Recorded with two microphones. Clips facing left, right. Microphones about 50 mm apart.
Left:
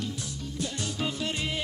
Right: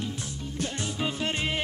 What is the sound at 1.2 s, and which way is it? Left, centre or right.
Music, right.